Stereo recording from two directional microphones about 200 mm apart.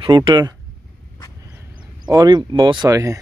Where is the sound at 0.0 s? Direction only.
25° right (ahead or behind).